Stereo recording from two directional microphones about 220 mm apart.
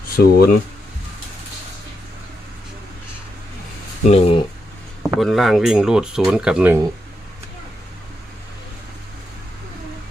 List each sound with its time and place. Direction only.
0.2 s speech: 45° left (ahead or behind)
4.1 s speech: 25° left (ahead or behind)
5.0 s speech: centre (ahead or behind)